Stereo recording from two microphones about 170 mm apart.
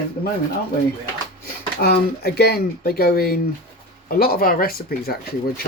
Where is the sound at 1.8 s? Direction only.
70° left (ahead or behind).